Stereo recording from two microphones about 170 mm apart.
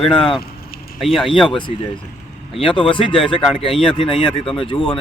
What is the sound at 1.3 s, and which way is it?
A man's voice, 30° left (ahead or behind).